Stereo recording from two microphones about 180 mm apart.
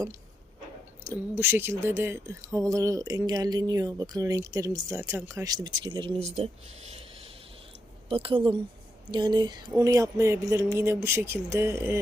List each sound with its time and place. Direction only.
1.0 s speech: 15° right (ahead or behind); by 6.5 s 35° right (ahead or behind)
8.1 s speech: 30° right (ahead or behind)